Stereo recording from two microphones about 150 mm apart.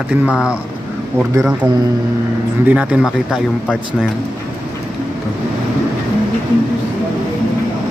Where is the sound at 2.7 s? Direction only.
10° right (ahead or behind).